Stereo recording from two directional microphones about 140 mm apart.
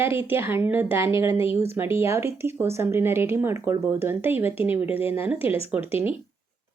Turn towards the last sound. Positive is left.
turn(degrees=-15)  # may be behind; listen again after turning